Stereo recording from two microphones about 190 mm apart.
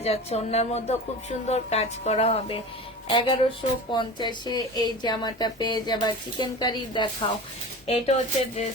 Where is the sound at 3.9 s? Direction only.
25° left (ahead or behind).